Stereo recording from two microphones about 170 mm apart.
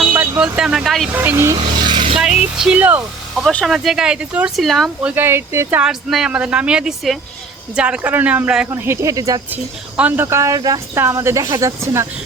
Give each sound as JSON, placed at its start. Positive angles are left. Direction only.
{"t": 0.0, "sound": "vehicle", "side_deg": -10}
{"t": 1.1, "sound": "speech", "side_deg": -10}
{"t": 1.5, "sound": "vehicle", "side_deg": -25}
{"t": 2.6, "sound": "speech", "side_deg": -5}
{"t": 3.4, "sound": "speech", "side_deg": 0}
{"t": 5.1, "sound": "speech", "side_deg": -15}
{"t": 5.8, "sound": "speech", "side_deg": 0}